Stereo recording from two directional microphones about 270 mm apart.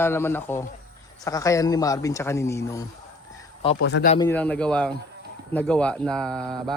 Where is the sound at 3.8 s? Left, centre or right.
Left.